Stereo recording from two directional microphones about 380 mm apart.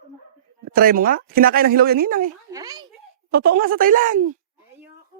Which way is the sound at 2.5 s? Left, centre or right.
Centre.